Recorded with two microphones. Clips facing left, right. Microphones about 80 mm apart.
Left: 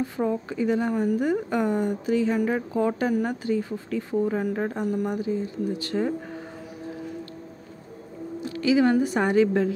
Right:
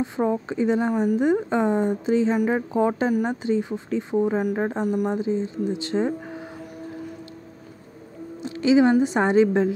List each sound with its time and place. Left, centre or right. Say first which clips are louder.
0.0 s speech: right 2 dB; right
8.4 s a woman's voice: right 3 dB; right